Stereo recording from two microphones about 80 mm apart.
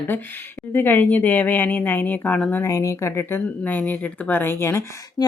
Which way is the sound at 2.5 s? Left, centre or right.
Left.